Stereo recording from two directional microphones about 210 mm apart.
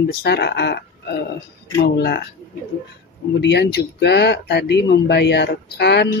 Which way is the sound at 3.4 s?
55° left (ahead or behind).